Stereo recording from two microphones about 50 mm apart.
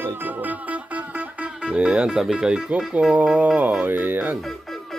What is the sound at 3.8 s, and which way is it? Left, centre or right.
Speech, right.